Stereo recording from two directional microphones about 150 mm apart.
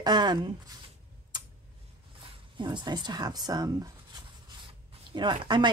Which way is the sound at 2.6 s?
30° right (ahead or behind).